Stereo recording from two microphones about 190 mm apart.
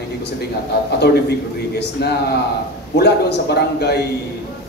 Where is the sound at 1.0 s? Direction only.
60° left (ahead or behind).